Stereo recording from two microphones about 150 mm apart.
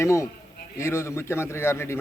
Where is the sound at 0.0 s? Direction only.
20° left (ahead or behind).